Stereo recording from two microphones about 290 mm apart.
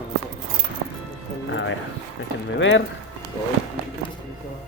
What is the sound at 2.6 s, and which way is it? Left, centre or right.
Speech, left.